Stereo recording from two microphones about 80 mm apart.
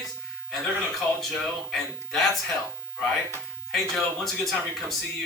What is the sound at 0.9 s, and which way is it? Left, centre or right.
Speech, centre.